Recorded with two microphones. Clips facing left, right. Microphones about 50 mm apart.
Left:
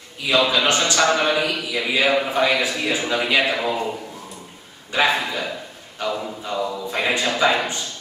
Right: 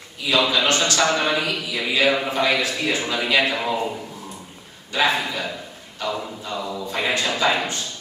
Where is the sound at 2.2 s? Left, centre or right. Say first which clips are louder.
Left 1 dB; centre.